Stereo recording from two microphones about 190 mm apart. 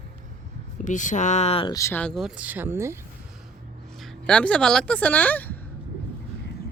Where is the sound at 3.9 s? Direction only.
5° left (ahead or behind).